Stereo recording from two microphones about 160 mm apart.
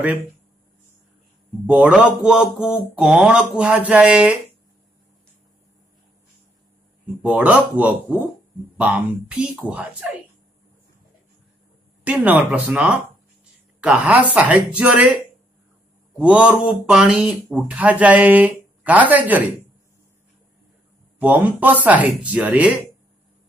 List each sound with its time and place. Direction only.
1.7 s speech: 5° right (ahead or behind)
7.2 s speech: 10° right (ahead or behind)
12.0 s a woman's voice: 10° right (ahead or behind)
16.2 s speech: 10° right (ahead or behind)
21.2 s speech: 10° right (ahead or behind)